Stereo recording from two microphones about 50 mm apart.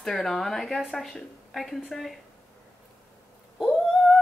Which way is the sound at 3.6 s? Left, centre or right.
Centre.